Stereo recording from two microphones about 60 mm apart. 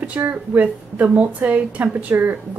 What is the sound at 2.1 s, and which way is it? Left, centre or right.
Speech, right.